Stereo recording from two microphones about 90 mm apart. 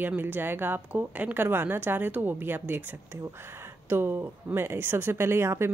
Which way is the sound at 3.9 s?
25° right (ahead or behind).